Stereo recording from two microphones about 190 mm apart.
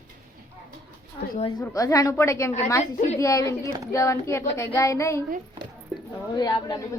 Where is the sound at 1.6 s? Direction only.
15° left (ahead or behind).